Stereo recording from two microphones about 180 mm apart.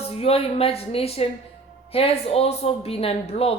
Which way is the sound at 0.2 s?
35° left (ahead or behind).